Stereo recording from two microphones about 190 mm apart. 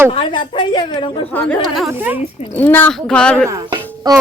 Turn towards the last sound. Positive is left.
turn(degrees=-20)  # may be behind; listen again after turning